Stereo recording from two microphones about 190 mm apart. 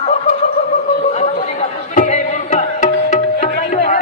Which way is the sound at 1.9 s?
40° left (ahead or behind).